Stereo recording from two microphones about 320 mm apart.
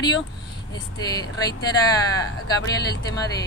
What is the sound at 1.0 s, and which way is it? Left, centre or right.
Speech, centre.